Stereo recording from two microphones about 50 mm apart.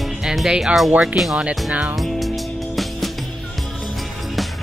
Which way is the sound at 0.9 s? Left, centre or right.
Right.